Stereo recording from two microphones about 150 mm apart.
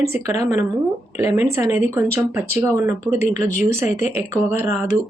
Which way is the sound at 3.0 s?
55° left (ahead or behind).